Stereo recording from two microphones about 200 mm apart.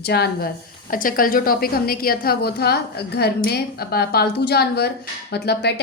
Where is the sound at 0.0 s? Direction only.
55° left (ahead or behind).